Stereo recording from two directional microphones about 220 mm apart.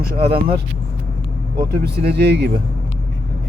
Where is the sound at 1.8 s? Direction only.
45° right (ahead or behind).